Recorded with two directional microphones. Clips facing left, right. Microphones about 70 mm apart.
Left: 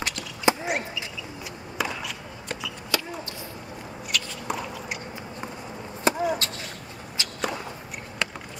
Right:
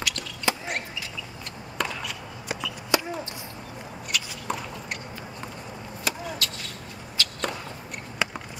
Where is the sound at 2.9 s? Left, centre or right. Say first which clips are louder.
Right 4 dB; centre.